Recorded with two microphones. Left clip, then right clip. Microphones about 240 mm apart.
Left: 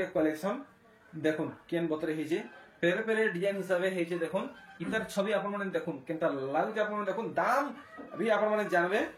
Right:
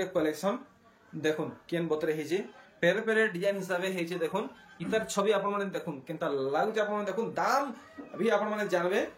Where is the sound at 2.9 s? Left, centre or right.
Right.